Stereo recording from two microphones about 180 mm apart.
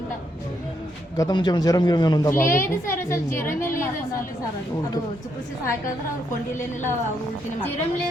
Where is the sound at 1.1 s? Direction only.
20° left (ahead or behind).